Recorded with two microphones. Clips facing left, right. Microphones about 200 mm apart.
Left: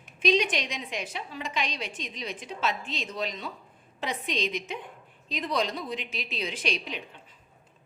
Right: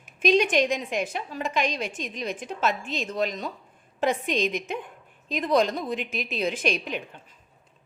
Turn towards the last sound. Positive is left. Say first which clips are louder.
# right 5 dB
turn(degrees=-50)  # may be behind; listen again after turning